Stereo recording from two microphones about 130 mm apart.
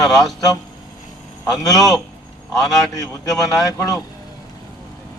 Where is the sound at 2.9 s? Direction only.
25° left (ahead or behind).